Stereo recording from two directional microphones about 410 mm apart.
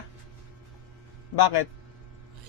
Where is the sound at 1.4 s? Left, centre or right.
Left.